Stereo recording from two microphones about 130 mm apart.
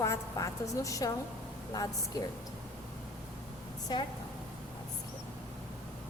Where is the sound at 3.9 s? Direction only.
30° left (ahead or behind).